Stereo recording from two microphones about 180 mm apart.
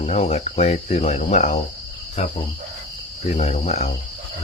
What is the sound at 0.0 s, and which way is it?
Speech, 35° left (ahead or behind).